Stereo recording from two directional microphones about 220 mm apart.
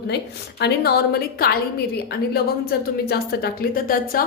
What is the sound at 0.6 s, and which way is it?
A woman's voice, 45° left (ahead or behind).